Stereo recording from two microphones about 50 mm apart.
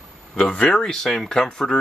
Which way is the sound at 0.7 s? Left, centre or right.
Centre.